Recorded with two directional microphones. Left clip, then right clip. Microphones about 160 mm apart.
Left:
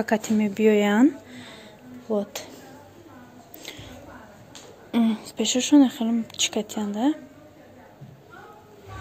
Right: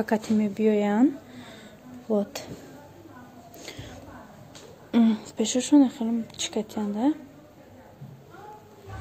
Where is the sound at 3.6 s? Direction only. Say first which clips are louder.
Left 2 dB; 20° right (ahead or behind).